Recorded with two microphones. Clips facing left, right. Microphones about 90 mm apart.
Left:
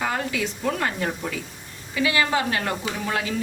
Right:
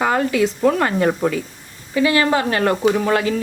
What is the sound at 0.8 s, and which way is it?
Speech, 55° right (ahead or behind).